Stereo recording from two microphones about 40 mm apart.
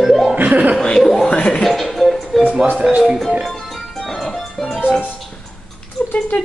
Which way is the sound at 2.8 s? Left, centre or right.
Centre.